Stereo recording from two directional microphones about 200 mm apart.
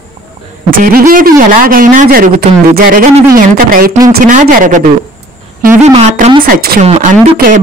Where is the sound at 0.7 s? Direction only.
45° right (ahead or behind).